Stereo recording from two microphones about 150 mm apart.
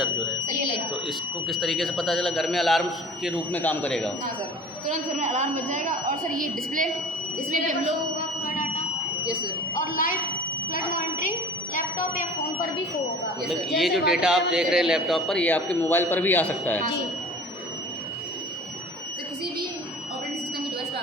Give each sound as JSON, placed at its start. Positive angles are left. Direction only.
{"t": 1.0, "sound": "a man's voice", "side_deg": 0}
{"t": 4.9, "sound": "a woman's voice", "side_deg": -55}
{"t": 9.8, "sound": "speech", "side_deg": 65}
{"t": 10.7, "sound": "a sound", "side_deg": 65}
{"t": 13.7, "sound": "a man's voice", "side_deg": 0}